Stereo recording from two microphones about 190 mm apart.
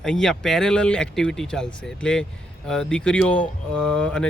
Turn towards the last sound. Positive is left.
turn(degrees=5)  # may be behind; listen again after turning